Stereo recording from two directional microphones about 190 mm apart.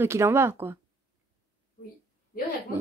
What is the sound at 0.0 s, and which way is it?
Speech, 15° right (ahead or behind).